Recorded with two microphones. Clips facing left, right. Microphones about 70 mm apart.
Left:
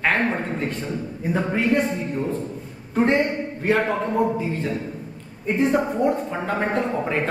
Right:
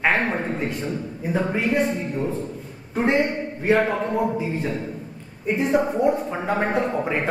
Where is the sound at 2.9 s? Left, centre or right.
Centre.